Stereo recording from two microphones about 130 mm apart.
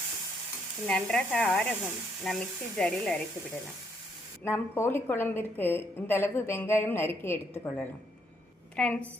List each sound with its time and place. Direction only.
0.9 s speech: 5° left (ahead or behind)
4.4 s a woman's voice: 15° left (ahead or behind)